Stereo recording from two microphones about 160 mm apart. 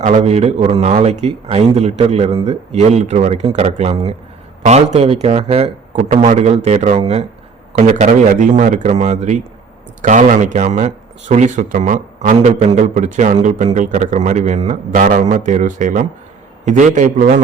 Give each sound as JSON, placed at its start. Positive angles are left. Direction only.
{"t": 0.0, "sound": "a man's voice", "side_deg": -50}